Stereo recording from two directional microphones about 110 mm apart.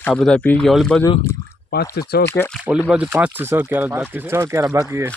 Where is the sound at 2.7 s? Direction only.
10° right (ahead or behind); by 4.8 s 25° right (ahead or behind).